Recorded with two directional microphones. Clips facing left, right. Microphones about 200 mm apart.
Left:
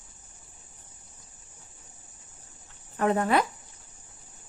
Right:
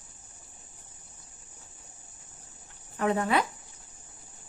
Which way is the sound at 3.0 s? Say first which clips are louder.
Left 2 dB; 45° left (ahead or behind).